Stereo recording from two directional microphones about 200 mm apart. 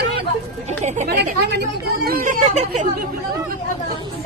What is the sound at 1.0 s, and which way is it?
Speech, 55° right (ahead or behind).